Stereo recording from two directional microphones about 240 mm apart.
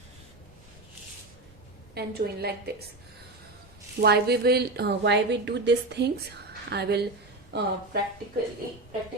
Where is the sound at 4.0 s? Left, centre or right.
Right.